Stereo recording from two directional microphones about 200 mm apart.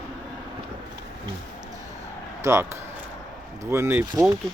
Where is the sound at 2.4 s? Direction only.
15° right (ahead or behind).